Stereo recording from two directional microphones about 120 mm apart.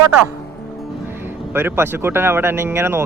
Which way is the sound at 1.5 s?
20° right (ahead or behind).